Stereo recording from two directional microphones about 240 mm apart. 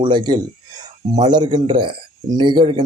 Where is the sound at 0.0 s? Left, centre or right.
Centre.